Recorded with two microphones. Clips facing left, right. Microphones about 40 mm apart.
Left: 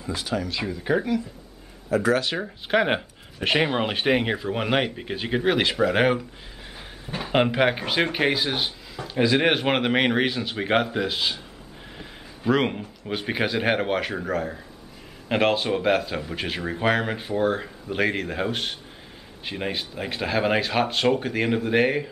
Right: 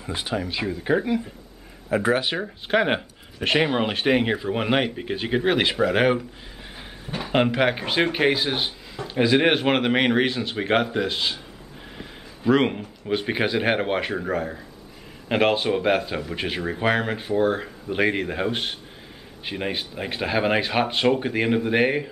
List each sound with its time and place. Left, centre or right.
0.0 s speech: right; by 1.1 s centre
1.9 s speech: right
2.3 s speech: centre